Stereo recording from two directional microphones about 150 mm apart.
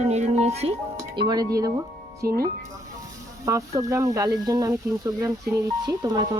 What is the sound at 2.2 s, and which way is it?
Speech, 90° right.